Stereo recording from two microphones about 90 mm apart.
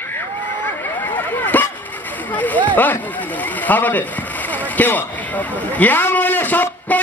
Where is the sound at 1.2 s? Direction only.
20° left (ahead or behind).